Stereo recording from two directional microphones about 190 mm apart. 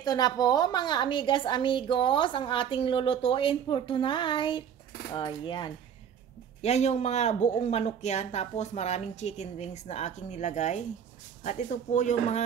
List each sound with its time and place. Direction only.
0.0 s a woman's voice: 20° left (ahead or behind)
6.6 s speech: 35° left (ahead or behind)